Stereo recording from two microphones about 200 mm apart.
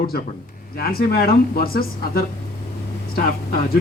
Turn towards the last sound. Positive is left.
turn(degrees=45)  # may be behind; listen again after turning